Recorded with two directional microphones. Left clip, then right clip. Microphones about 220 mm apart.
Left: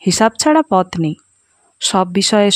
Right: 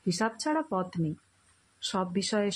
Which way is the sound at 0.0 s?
50° left (ahead or behind).